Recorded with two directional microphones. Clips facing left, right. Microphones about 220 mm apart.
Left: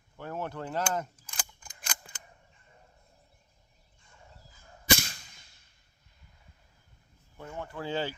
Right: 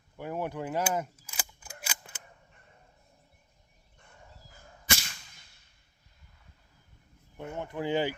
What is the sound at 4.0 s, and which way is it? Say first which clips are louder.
Fowl: right 2 dB; 65° right (ahead or behind).